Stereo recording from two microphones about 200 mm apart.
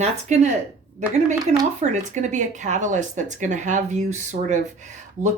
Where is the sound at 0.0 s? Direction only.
35° right (ahead or behind).